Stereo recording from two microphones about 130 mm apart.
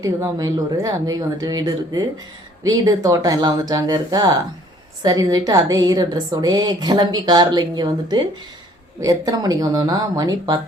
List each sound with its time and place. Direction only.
0.0 s a woman's voice: 30° right (ahead or behind)